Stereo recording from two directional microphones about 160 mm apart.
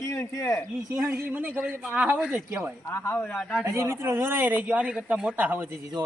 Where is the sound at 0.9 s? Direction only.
15° right (ahead or behind).